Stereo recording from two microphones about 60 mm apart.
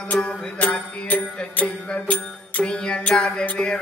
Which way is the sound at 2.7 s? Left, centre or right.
Centre.